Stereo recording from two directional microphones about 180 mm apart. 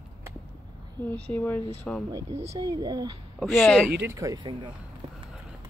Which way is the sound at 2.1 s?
20° right (ahead or behind).